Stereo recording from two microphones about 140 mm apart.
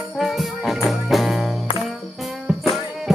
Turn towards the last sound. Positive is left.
turn(degrees=0)  # may be behind; listen again after turning